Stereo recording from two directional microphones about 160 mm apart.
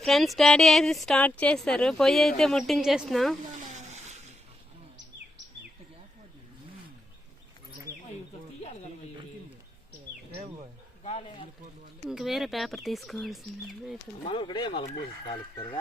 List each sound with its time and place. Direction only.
0.0 s a woman's voice: centre (ahead or behind)
3.6 s a sound: 50° right (ahead or behind)
11.0 s wild animals: 40° left (ahead or behind)
12.0 s a woman's voice: centre (ahead or behind)
14.3 s speech: 30° left (ahead or behind)